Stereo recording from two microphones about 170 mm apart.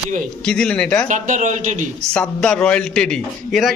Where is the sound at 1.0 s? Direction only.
45° right (ahead or behind).